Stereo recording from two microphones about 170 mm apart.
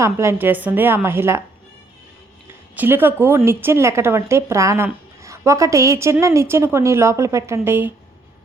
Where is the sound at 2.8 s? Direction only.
10° right (ahead or behind).